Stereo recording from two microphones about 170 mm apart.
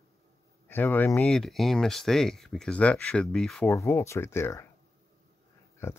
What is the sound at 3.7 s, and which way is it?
Speech, 15° left (ahead or behind).